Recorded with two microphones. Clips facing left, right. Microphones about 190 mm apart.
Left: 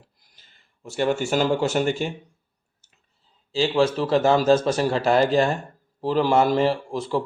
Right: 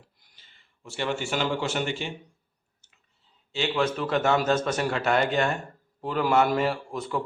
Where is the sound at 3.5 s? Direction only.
30° left (ahead or behind).